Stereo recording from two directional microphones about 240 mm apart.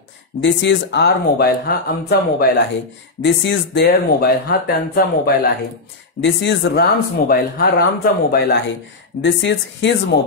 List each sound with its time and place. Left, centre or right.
0.4 s speech: left